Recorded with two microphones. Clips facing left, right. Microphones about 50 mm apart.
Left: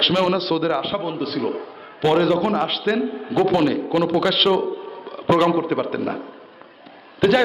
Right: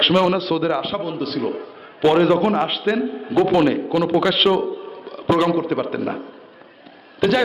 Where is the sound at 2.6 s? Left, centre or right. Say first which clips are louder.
Right 1 dB; centre.